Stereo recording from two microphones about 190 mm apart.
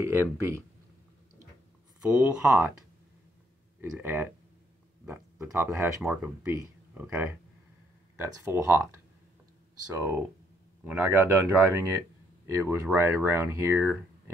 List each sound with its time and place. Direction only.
0.0 s speech: 10° right (ahead or behind)
2.0 s speech: 15° right (ahead or behind)
4.0 s speech: 10° right (ahead or behind)
8.4 s speech: 15° right (ahead or behind)